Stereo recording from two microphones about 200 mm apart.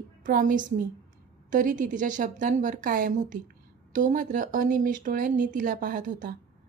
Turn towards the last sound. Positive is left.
turn(degrees=-40)  # may be behind; listen again after turning